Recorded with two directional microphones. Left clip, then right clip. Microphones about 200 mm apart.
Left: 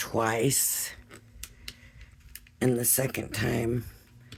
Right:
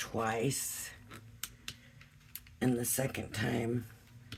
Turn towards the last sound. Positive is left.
turn(degrees=50)  # may be behind; listen again after turning